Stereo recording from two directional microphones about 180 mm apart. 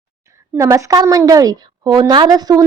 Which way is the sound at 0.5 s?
15° right (ahead or behind).